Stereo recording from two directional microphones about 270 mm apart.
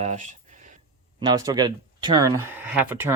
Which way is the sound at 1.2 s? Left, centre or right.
Centre.